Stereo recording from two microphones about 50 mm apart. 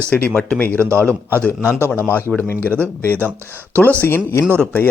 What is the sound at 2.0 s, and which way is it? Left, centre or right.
Speech, left.